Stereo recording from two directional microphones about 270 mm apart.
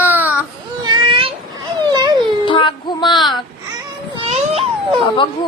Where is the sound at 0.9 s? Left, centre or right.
Centre.